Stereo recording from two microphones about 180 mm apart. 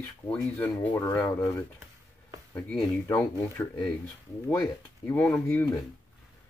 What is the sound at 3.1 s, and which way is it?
Speech, 10° left (ahead or behind).